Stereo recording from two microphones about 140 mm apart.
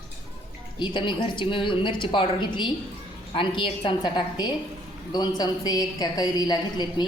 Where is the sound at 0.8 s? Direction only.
35° left (ahead or behind).